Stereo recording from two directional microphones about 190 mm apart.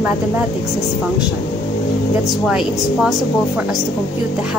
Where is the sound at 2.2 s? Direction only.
Centre (ahead or behind).